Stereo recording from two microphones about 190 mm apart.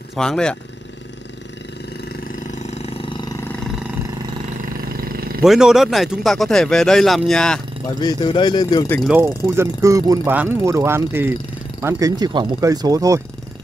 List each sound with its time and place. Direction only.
0.1 s speech: 5° left (ahead or behind)
2.6 s roar: 30° left (ahead or behind)
4.9 s roar: 50° right (ahead or behind)
5.4 s speech: centre (ahead or behind)
8.0 s speech: 20° left (ahead or behind)
9.0 s speech: 10° right (ahead or behind)